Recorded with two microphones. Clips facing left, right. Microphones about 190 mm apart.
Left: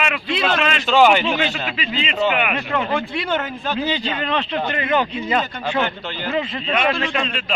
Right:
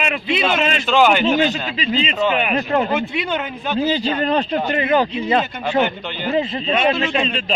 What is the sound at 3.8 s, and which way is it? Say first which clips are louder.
A man's voice: right 6 dB; 40° right (ahead or behind).